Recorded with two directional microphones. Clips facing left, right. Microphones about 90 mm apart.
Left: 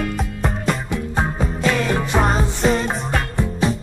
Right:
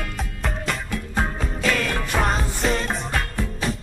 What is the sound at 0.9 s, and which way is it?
Music, 20° left (ahead or behind).